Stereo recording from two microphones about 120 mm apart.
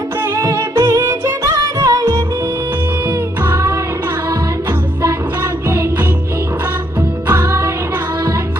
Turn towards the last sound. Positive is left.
turn(degrees=-20)  # may be behind; listen again after turning